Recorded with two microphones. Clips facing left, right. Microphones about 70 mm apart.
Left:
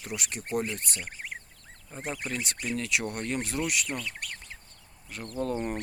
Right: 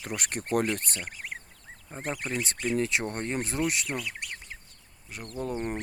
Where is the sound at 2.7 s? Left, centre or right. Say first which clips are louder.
Right 2 dB; right.